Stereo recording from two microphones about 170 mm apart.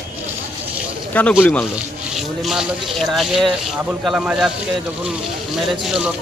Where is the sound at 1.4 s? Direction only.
10° left (ahead or behind).